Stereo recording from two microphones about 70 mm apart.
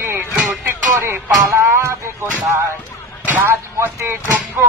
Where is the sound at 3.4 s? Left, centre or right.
Right.